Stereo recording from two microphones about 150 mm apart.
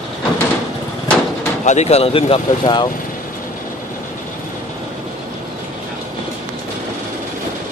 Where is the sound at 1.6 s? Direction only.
50° left (ahead or behind); by 2.9 s 30° left (ahead or behind).